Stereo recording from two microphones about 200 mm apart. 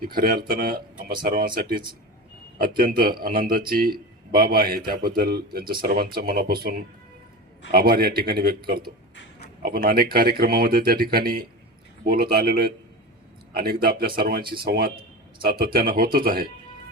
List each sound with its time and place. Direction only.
0.0 s speech: 45° right (ahead or behind)